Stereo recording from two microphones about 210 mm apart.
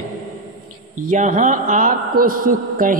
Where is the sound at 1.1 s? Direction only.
35° right (ahead or behind).